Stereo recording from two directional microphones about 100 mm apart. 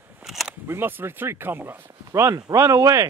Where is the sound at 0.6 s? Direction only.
20° right (ahead or behind).